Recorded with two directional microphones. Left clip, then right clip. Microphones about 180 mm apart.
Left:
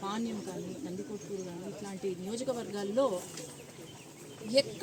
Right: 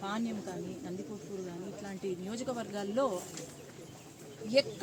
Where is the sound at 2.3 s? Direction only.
5° right (ahead or behind).